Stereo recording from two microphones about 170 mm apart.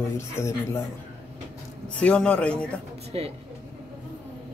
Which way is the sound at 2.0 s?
5° left (ahead or behind).